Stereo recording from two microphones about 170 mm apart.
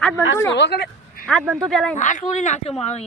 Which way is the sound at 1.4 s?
Centre (ahead or behind).